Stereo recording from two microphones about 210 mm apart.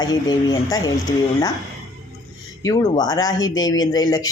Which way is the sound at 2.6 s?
15° left (ahead or behind).